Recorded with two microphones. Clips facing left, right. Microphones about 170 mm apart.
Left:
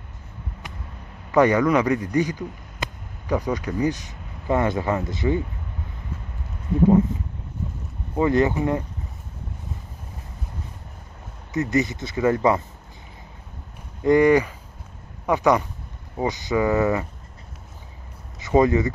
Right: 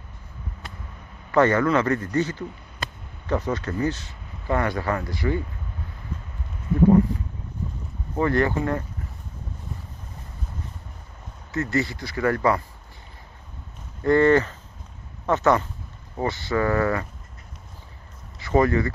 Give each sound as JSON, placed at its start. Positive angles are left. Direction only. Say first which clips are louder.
{"t": 1.3, "sound": "a man's voice", "louder": "left 2 dB", "side_deg": 15}
{"t": 8.1, "sound": "speech", "louder": "left 2 dB", "side_deg": 15}
{"t": 11.5, "sound": "speech", "louder": "left 3 dB", "side_deg": 20}
{"t": 14.0, "sound": "speech", "louder": "left 1 dB", "side_deg": 15}
{"t": 18.4, "sound": "speech", "louder": "left 2 dB", "side_deg": 20}